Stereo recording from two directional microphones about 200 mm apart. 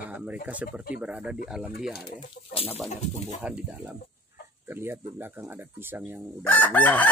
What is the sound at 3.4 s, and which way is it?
Speech, 5° right (ahead or behind).